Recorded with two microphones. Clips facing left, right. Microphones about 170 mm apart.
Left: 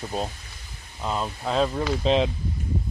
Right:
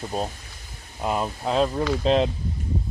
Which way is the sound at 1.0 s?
10° right (ahead or behind).